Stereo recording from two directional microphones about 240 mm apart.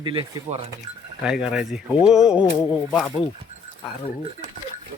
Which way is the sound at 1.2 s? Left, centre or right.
Centre.